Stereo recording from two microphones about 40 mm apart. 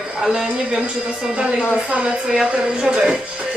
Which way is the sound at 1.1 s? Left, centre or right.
Right.